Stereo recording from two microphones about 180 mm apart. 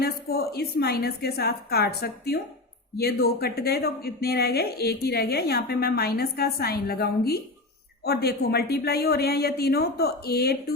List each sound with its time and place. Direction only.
0.0 s a woman's voice: 60° left (ahead or behind)